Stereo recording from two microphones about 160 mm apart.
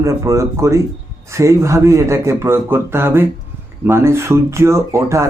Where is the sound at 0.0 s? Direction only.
20° right (ahead or behind).